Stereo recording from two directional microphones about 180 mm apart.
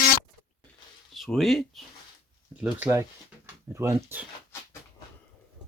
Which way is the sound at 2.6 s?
10° right (ahead or behind).